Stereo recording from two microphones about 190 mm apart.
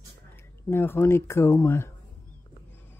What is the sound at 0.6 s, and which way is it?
Speech, 10° left (ahead or behind).